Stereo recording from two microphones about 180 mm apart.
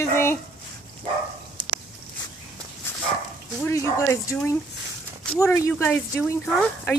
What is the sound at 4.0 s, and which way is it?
Speech, 15° left (ahead or behind).